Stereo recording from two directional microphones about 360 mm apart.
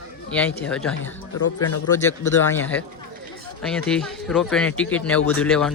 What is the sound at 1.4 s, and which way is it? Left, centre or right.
Speech, left.